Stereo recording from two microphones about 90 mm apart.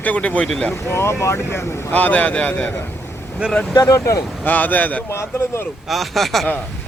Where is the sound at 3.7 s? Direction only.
40° left (ahead or behind).